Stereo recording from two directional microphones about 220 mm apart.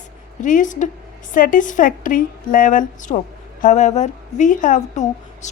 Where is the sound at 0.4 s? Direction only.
35° left (ahead or behind).